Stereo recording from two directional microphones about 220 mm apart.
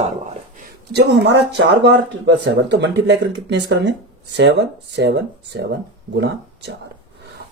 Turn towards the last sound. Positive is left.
turn(degrees=-50)  # may be behind; listen again after turning